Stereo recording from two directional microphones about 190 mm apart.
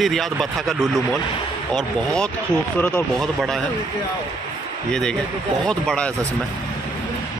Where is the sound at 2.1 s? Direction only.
5° left (ahead or behind).